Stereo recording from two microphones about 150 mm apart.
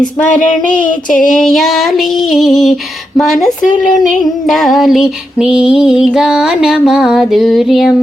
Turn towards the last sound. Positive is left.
turn(degrees=0)  # may be behind; listen again after turning